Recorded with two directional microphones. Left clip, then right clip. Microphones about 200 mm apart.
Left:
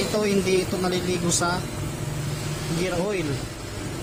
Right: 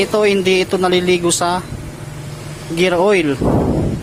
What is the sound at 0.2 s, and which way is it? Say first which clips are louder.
Speech: right 8 dB; 35° right (ahead or behind).